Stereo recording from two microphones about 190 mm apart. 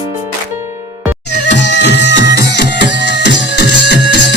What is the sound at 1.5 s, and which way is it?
Music, 65° left (ahead or behind).